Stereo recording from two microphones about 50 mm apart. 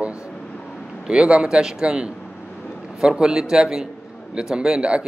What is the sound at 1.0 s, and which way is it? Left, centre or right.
Speech, right.